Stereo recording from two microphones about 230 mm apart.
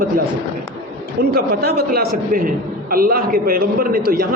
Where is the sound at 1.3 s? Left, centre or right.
Right.